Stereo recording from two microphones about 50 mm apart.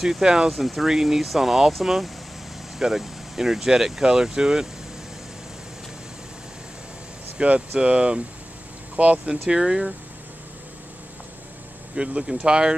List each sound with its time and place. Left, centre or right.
0.0 s speech: centre
0.5 s speech: centre
7.3 s speech: right
9.5 s speech: centre
11.9 s speech: centre